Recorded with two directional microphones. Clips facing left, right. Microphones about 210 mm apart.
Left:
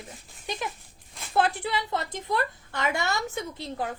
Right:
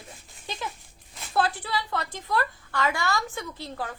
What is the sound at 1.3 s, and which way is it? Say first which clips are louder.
A woman's voice: left 1 dB; 20° left (ahead or behind).